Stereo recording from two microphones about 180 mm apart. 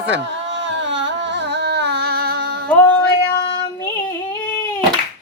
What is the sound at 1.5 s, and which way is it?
Singing, 70° right (ahead or behind).